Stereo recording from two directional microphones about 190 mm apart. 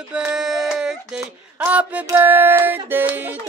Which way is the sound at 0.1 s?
5° right (ahead or behind).